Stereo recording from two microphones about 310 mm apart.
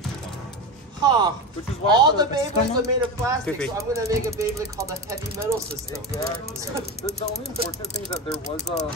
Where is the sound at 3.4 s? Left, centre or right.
Centre.